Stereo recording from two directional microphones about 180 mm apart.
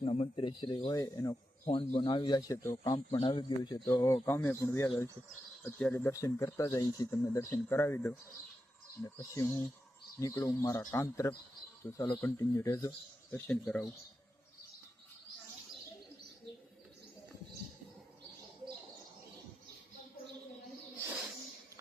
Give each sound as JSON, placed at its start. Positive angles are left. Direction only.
{"t": 0.0, "sound": "speech", "side_deg": 30}
{"t": 1.6, "sound": "speech", "side_deg": 30}
{"t": 13.3, "sound": "speech", "side_deg": 5}